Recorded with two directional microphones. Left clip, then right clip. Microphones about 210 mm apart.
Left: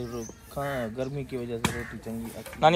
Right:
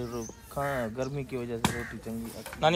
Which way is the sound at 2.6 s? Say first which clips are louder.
Left 5 dB; 10° right (ahead or behind).